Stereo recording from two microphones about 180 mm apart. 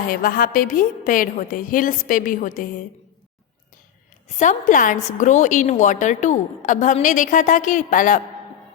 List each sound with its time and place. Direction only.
0.1 s a woman's voice: 55° left (ahead or behind)
4.4 s a woman's voice: 45° left (ahead or behind)